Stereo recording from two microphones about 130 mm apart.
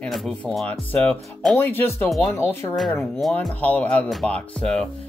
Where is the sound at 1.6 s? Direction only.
15° left (ahead or behind).